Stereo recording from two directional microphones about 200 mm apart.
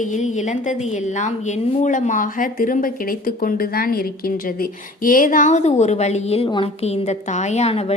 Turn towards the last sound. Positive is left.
turn(degrees=30)  # may be behind; listen again after turning